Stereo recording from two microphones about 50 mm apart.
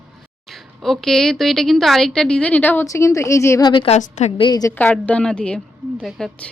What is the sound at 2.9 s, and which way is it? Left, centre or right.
Speech, left.